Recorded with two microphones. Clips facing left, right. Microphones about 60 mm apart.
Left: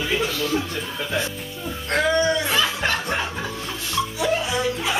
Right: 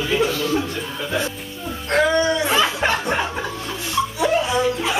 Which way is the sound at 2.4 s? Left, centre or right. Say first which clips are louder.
Right 3 dB; right.